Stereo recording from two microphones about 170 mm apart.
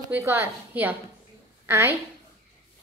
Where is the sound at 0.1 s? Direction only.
15° right (ahead or behind).